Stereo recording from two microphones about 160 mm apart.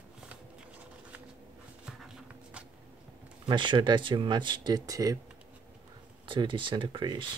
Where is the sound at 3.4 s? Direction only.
30° right (ahead or behind).